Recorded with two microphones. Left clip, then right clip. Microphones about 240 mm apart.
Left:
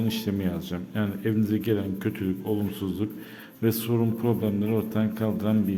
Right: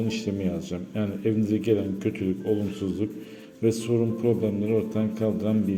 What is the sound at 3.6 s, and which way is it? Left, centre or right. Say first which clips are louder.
A man's voice: right 2 dB; centre.